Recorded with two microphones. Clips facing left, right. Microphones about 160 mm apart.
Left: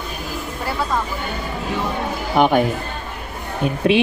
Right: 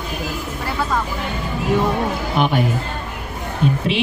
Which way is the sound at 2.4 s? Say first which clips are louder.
Left 4 dB; 55° left (ahead or behind).